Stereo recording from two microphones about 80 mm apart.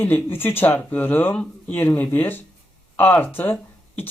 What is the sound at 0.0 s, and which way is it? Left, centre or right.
Speech, left.